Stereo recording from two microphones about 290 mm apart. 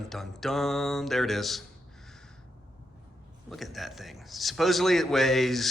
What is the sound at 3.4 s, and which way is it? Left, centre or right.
A man's voice, centre.